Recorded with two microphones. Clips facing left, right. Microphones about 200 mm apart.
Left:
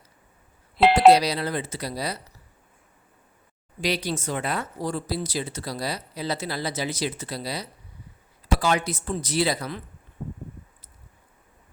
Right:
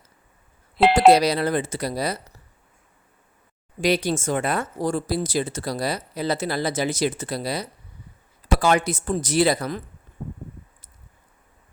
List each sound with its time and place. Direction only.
0.8 s doorbell: centre (ahead or behind)
1.1 s speech: 50° right (ahead or behind)
3.8 s speech: 50° right (ahead or behind)